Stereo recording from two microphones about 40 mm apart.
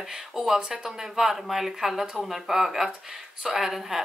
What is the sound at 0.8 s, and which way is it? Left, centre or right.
Speech, centre.